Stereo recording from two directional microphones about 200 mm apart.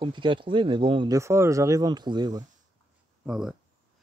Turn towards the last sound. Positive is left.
turn(degrees=-5)  # may be behind; listen again after turning